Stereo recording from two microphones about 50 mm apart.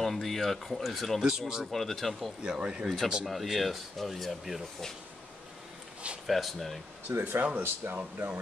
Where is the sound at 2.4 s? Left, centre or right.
Centre.